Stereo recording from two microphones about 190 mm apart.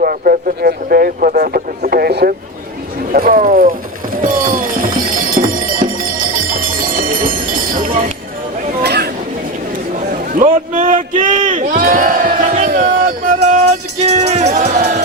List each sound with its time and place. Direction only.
0.0 s speech: 45° right (ahead or behind)
4.2 s music: 45° right (ahead or behind)
6.1 s jingle bell: 45° right (ahead or behind)
8.8 s chatter: 60° right (ahead or behind)
10.3 s a sound: 45° right (ahead or behind)
14.0 s music: 35° right (ahead or behind)